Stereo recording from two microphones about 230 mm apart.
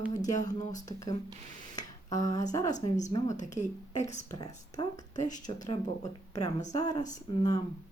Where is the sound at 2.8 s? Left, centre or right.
Left.